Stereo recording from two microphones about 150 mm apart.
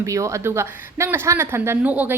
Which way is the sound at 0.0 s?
20° right (ahead or behind).